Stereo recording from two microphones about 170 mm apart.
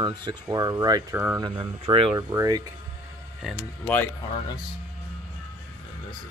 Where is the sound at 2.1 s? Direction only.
20° right (ahead or behind).